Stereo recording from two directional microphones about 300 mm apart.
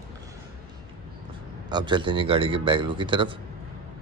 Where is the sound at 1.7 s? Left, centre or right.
Centre.